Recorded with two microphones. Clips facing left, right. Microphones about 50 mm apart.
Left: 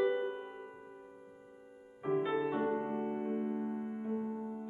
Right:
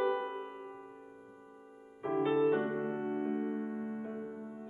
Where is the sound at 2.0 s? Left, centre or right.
Centre.